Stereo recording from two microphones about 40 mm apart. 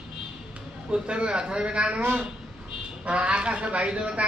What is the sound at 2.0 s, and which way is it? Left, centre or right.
Speech, right.